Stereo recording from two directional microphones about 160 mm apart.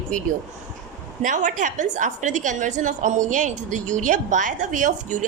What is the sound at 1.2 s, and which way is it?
A woman's voice, 55° right (ahead or behind).